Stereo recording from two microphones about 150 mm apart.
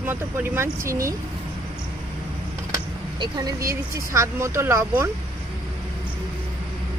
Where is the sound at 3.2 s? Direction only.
25° right (ahead or behind).